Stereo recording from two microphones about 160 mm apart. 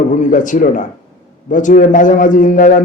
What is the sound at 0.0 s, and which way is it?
A man's voice, 50° left (ahead or behind).